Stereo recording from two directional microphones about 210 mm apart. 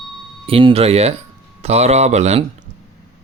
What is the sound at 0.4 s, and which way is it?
Speech, 25° right (ahead or behind).